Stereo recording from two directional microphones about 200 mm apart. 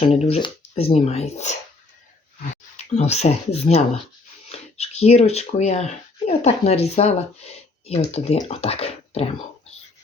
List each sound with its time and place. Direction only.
0.0 s speech: 30° left (ahead or behind)
2.7 s speech: 35° left (ahead or behind)